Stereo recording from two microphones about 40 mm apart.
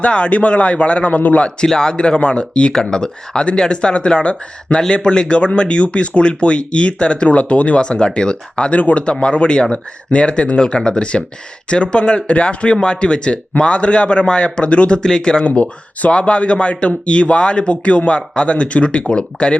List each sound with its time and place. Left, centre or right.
0.0 s a man's voice: left
1.6 s speech: centre
8.8 s a man's voice: left
9.2 s speech: left
15.4 s speech: left